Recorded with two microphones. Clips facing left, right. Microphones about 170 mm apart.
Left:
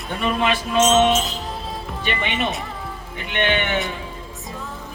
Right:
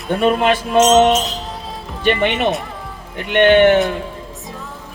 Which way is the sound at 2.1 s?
55° right (ahead or behind).